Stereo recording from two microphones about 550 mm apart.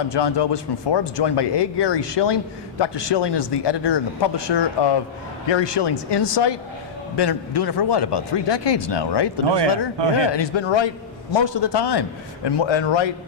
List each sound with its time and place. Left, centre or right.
0.1 s a man's voice: left